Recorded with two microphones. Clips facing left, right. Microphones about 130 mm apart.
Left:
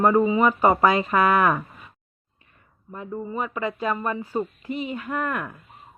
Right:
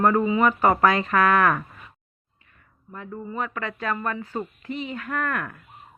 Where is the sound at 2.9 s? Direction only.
15° left (ahead or behind).